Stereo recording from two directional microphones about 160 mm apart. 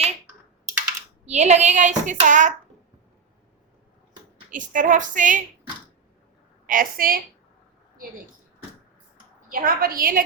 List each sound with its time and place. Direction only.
1.2 s a woman's voice: 45° right (ahead or behind)
4.5 s a woman's voice: 55° right (ahead or behind)
6.7 s a woman's voice: 60° right (ahead or behind)
9.5 s a woman's voice: 60° right (ahead or behind)